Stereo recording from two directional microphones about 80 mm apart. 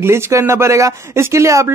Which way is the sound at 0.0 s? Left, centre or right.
Right.